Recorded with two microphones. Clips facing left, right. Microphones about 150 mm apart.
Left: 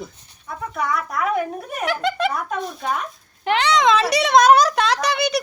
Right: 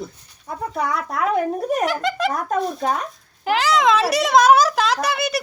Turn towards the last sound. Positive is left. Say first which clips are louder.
# left 1 dB
turn(degrees=0)  # may be behind; listen again after turning